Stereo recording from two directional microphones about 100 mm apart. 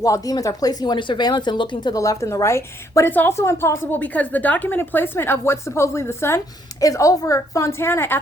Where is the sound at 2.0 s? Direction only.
30° left (ahead or behind).